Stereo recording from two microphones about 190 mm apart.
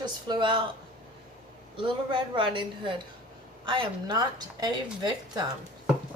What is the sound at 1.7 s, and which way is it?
Speech, 25° right (ahead or behind).